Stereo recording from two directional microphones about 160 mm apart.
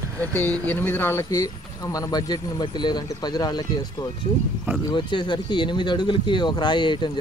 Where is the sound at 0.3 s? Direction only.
10° left (ahead or behind).